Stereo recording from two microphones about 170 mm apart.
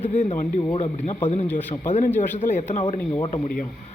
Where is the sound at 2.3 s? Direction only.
45° left (ahead or behind).